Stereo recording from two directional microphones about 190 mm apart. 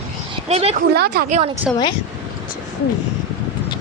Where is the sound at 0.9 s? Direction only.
55° right (ahead or behind).